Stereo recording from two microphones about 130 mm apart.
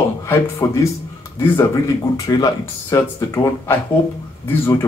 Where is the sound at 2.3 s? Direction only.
25° left (ahead or behind).